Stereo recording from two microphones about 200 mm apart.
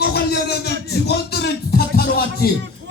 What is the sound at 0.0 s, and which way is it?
Music, 55° left (ahead or behind).